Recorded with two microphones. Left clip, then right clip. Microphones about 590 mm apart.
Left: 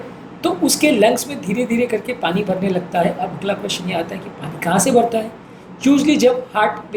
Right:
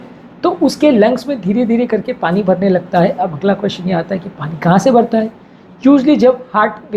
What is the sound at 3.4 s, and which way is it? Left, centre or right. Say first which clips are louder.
Speech: right 5 dB; right.